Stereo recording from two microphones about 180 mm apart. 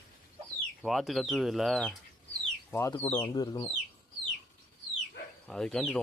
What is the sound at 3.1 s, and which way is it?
Speech, 15° left (ahead or behind).